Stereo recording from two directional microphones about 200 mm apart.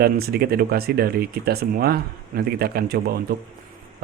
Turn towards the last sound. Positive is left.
turn(degrees=-50)  # may be behind; listen again after turning